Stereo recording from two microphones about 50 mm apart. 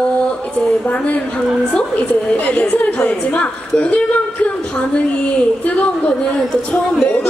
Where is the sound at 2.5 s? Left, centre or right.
Left.